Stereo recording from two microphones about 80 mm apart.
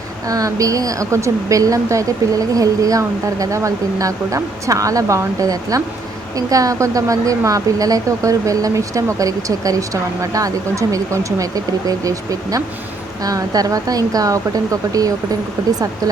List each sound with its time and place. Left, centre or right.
0.3 s speech: right